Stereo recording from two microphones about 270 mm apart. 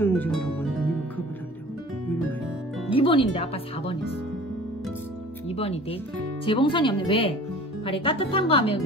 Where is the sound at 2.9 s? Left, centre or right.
Centre.